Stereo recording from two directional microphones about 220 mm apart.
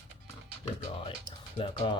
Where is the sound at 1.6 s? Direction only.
20° left (ahead or behind).